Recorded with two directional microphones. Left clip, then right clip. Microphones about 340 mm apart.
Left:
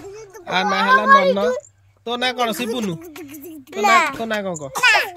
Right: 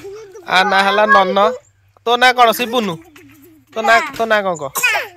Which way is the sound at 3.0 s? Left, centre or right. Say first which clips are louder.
Left 5 dB; left.